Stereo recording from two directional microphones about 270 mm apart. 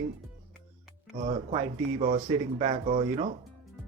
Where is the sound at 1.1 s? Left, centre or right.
Right.